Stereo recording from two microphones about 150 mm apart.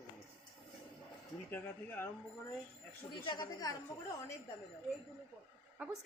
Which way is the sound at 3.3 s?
25° left (ahead or behind).